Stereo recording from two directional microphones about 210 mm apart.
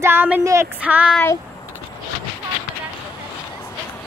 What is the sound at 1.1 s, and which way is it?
Speech, 10° left (ahead or behind).